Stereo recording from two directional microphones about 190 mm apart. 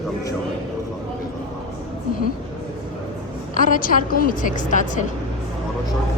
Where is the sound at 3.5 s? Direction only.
45° left (ahead or behind).